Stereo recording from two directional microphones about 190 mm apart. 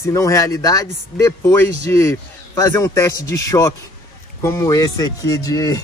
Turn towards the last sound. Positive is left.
turn(degrees=20)  # may be behind; listen again after turning